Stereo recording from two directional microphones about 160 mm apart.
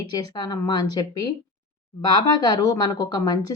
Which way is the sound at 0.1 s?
25° left (ahead or behind).